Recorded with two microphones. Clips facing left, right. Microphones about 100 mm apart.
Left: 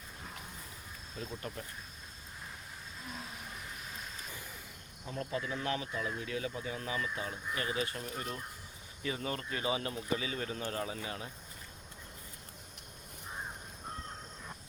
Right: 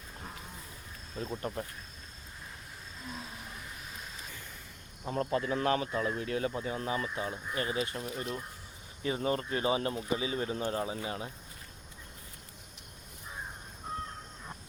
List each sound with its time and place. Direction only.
1.2 s speech: 35° right (ahead or behind)
5.0 s speech: 45° right (ahead or behind); by 8.0 s 30° right (ahead or behind)
9.0 s speech: 30° right (ahead or behind)